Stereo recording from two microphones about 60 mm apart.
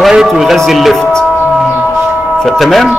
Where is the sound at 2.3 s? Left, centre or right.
Centre.